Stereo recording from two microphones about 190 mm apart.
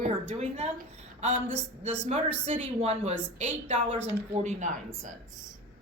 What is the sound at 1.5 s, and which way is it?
Speech, 5° left (ahead or behind).